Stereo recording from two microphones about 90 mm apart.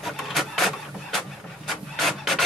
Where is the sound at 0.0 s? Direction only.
Centre (ahead or behind).